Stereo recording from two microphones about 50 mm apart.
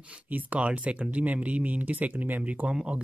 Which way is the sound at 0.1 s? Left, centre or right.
Right.